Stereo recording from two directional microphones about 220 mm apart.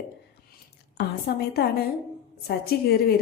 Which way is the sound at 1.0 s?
45° left (ahead or behind).